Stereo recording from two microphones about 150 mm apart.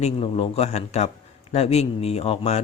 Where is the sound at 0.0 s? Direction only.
40° left (ahead or behind).